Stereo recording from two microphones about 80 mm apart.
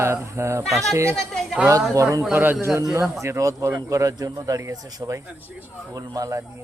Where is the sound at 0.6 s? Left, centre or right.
Centre.